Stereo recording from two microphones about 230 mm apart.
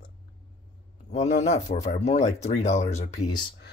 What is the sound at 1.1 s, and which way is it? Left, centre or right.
Speech, left.